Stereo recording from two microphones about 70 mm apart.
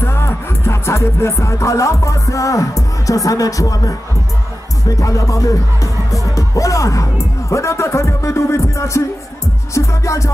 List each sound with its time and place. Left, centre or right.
0.0 s music: left